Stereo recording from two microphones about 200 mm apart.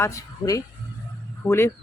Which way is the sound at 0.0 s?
15° left (ahead or behind).